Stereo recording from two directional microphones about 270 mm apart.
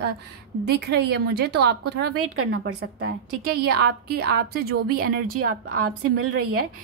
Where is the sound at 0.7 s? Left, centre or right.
Right.